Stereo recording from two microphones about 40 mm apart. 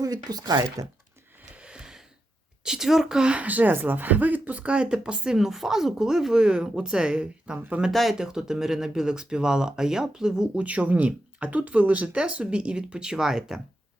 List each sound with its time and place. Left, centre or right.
1.5 s a sound: right
2.6 s speech: centre
3.2 s speech: right
3.4 s speech: right
4.6 s speech: right
5.5 s speech: centre; by 7.6 s right
7.9 s speech: centre
8.2 s speech: centre
10.5 s speech: right; by 13.6 s centre